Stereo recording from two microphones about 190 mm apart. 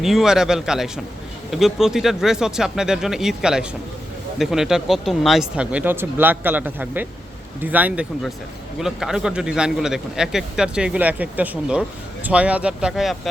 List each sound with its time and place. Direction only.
0.0 s a man's voice: centre (ahead or behind)